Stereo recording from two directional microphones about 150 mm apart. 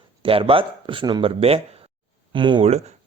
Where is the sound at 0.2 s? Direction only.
35° right (ahead or behind).